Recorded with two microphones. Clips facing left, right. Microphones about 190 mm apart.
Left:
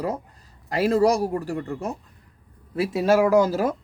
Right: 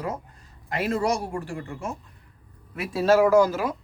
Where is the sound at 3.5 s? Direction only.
45° left (ahead or behind).